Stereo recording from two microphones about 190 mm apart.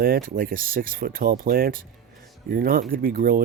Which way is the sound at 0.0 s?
50° right (ahead or behind).